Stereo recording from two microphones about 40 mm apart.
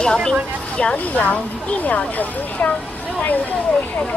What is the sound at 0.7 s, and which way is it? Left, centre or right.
Speech, left.